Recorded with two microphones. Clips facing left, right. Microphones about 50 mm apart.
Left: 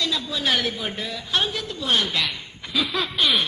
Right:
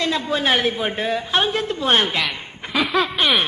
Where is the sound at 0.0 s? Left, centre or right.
Right.